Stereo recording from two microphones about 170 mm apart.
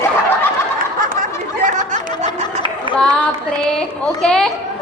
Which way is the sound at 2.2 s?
30° right (ahead or behind).